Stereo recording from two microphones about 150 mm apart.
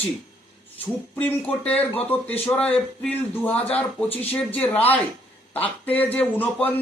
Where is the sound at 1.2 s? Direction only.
10° left (ahead or behind).